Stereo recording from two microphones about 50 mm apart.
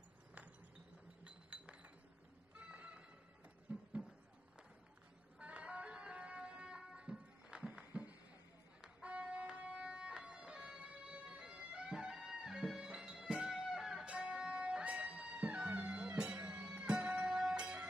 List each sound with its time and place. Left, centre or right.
1.2 s chink: right
2.5 s music: right
3.7 s a sound: right
5.4 s music: right
13.7 s music: centre
14.0 s music: right